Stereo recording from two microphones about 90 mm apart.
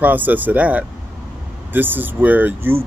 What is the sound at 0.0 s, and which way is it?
Speech, 20° right (ahead or behind).